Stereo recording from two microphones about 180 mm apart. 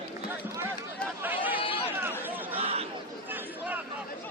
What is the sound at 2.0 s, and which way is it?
Chatter, 10° right (ahead or behind).